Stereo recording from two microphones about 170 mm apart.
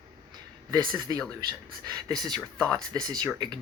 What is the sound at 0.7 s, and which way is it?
Speech, 20° right (ahead or behind).